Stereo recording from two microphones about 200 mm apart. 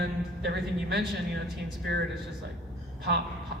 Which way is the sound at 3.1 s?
55° right (ahead or behind).